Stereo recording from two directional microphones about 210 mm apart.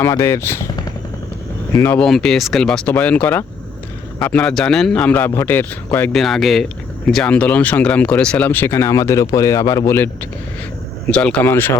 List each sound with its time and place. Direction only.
0.0 s speech: 10° left (ahead or behind)
2.0 s a man's voice: centre (ahead or behind)
11.1 s speech: 5° left (ahead or behind)